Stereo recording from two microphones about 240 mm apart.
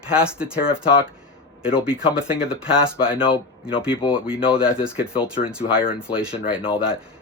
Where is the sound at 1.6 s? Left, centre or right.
Centre.